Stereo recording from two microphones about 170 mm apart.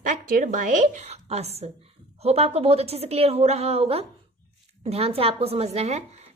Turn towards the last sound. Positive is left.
turn(degrees=-40)  # may be behind; listen again after turning